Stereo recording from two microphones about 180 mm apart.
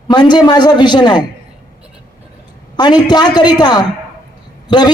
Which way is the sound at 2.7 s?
25° left (ahead or behind).